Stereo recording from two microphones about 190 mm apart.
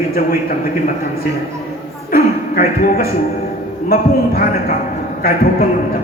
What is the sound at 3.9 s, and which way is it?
A man's voice, 50° left (ahead or behind).